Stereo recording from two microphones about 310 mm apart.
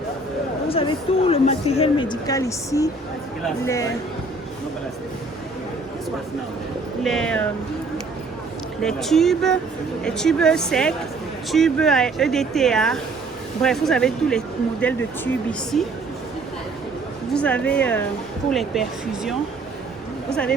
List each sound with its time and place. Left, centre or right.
0.7 s speech: centre
7.0 s speech: centre
8.8 s speech: centre
17.3 s speech: centre